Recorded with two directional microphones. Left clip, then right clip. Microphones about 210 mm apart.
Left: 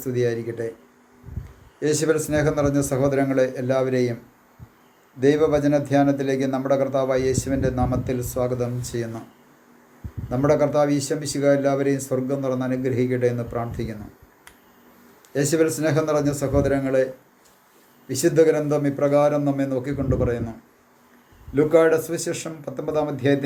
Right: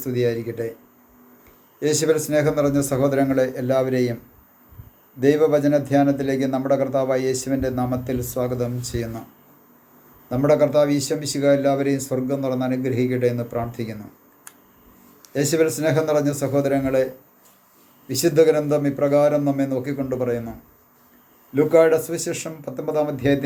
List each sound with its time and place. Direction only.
0.0 s a man's voice: 5° right (ahead or behind)
1.8 s a man's voice: 5° right (ahead or behind)
5.2 s a man's voice: 5° right (ahead or behind)
10.2 s a man's voice: 5° right (ahead or behind)
15.3 s a man's voice: 5° right (ahead or behind)
18.1 s a man's voice: 5° right (ahead or behind)
21.5 s a man's voice: 5° right (ahead or behind)